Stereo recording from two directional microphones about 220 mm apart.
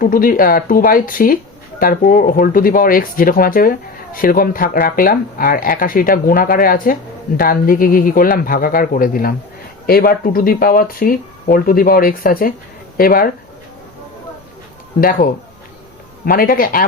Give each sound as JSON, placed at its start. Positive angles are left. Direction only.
{"t": 0.0, "sound": "speech", "side_deg": 40}
{"t": 16.2, "sound": "speech", "side_deg": 40}